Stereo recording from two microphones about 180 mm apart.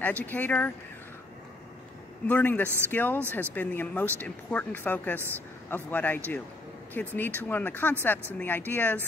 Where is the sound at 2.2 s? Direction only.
10° left (ahead or behind).